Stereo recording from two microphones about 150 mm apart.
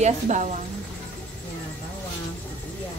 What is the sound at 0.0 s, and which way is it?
Speech, 55° right (ahead or behind).